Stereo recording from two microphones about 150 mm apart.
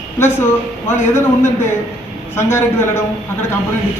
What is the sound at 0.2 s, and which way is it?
Speech, 15° left (ahead or behind).